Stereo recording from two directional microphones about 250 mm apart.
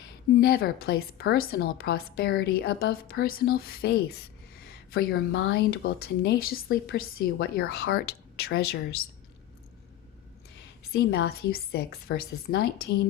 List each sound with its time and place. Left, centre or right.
0.3 s speech: left
10.9 s speech: left